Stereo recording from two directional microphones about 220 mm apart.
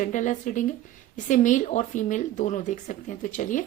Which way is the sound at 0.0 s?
35° left (ahead or behind).